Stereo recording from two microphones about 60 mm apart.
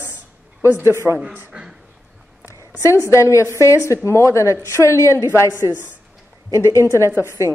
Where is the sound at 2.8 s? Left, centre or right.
Left.